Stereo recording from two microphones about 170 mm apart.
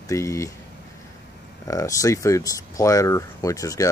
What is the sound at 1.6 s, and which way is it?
Speech, 20° left (ahead or behind).